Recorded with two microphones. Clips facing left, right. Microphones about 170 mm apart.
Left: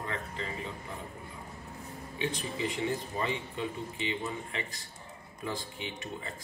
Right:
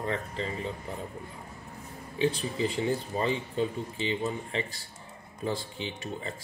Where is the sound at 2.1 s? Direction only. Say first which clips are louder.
Right 6 dB; 30° right (ahead or behind).